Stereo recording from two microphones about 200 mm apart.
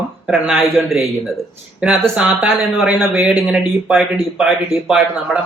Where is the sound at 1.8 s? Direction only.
5° right (ahead or behind).